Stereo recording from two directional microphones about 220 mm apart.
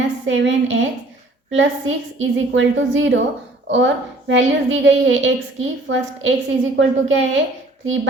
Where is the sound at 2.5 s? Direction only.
60° right (ahead or behind).